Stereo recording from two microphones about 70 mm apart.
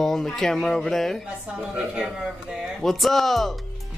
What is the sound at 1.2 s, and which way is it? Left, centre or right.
A woman's voice, centre.